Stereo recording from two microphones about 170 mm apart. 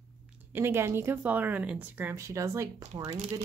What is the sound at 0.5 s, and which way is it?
Speech, 15° right (ahead or behind).